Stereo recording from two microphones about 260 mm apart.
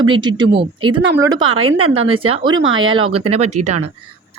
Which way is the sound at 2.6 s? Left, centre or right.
Right.